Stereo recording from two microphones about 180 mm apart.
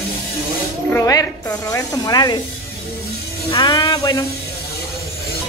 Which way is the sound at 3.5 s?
25° left (ahead or behind).